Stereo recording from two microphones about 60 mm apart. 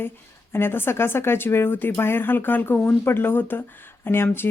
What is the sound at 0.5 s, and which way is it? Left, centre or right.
Speech, left.